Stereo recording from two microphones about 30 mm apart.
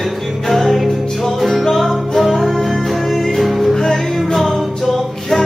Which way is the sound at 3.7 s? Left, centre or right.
Centre.